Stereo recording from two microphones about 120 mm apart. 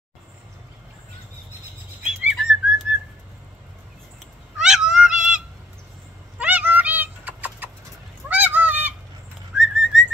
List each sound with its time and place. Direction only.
2.2 s bird flight: 5° right (ahead or behind)
4.6 s cat: 5° right (ahead or behind)
6.3 s a sound: 10° right (ahead or behind)
8.3 s goose: 15° right (ahead or behind)
9.6 s whistling: 5° right (ahead or behind)